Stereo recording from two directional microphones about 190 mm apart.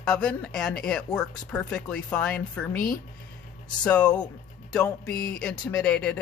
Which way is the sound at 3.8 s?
5° left (ahead or behind).